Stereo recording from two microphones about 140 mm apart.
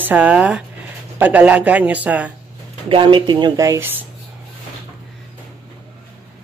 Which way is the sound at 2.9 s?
35° right (ahead or behind).